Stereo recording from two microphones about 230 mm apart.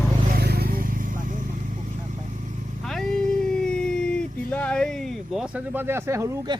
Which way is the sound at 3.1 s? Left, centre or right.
Right.